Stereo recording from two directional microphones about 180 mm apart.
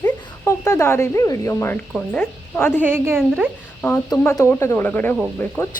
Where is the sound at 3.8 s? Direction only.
10° left (ahead or behind).